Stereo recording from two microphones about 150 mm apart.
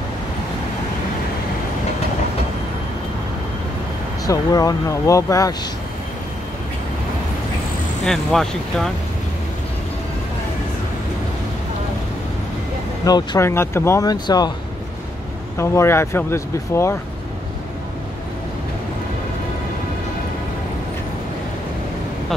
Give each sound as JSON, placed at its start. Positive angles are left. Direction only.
{"t": 4.3, "sound": "speech", "side_deg": 25}
{"t": 8.0, "sound": "speech", "side_deg": 5}
{"t": 13.0, "sound": "speech", "side_deg": 25}
{"t": 15.5, "sound": "speech", "side_deg": 20}